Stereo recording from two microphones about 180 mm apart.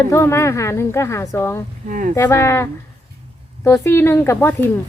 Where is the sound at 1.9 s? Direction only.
45° right (ahead or behind).